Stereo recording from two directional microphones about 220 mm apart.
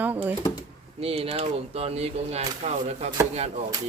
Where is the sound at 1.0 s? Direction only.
30° right (ahead or behind).